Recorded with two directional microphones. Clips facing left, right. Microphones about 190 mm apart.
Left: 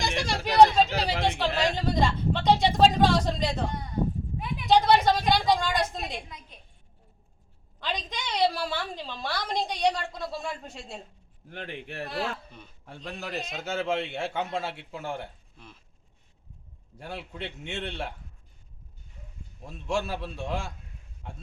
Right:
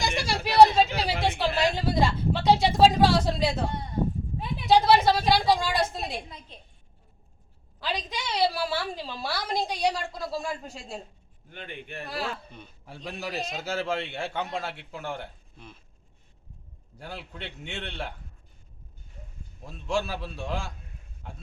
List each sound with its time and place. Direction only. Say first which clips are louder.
0.0 s a sound: even; 5° right (ahead or behind)
4.4 s a sound: even; 30° right (ahead or behind)
4.7 s a sound: right 1 dB; 5° right (ahead or behind)
6.0 s a woman's voice: right 2 dB; 30° right (ahead or behind)
7.8 s a woman's voice: right 1 dB; 5° right (ahead or behind)
11.5 s a man's voice: left 2 dB; 85° left
12.0 s a woman's voice: left 1 dB; centre (ahead or behind)
17.0 s a woman's voice: left 2 dB; centre (ahead or behind)
19.6 s a woman's voice: right 1 dB; centre (ahead or behind)